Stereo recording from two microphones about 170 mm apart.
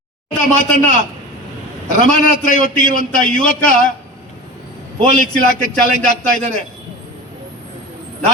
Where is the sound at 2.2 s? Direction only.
50° left (ahead or behind).